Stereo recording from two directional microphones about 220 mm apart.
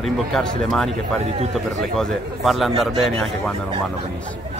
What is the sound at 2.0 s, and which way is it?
A man's voice, centre (ahead or behind).